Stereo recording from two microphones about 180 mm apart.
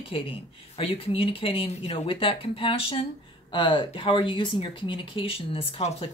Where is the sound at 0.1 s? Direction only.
30° left (ahead or behind).